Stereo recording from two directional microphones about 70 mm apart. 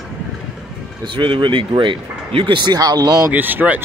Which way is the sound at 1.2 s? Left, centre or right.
Right.